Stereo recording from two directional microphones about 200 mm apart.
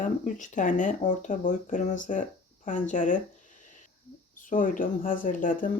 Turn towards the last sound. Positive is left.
turn(degrees=45)  # may be behind; listen again after turning